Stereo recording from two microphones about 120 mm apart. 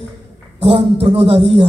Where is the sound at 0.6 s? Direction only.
55° right (ahead or behind).